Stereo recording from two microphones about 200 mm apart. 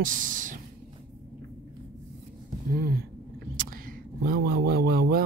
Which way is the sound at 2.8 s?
50° right (ahead or behind).